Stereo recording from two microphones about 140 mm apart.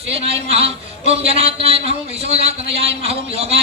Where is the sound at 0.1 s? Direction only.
45° right (ahead or behind).